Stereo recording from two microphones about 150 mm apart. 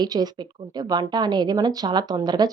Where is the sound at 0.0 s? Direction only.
25° right (ahead or behind).